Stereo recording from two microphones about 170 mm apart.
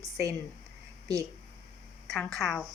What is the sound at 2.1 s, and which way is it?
Speech, centre (ahead or behind).